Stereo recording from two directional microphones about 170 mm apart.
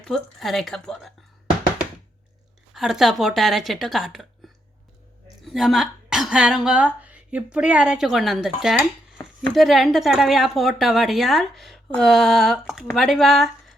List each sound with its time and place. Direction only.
0.0 s a woman's voice: centre (ahead or behind)
2.7 s a woman's voice: centre (ahead or behind)
5.5 s a woman's voice: centre (ahead or behind)
9.2 s a sound: 25° left (ahead or behind)
9.6 s a woman's voice: centre (ahead or behind)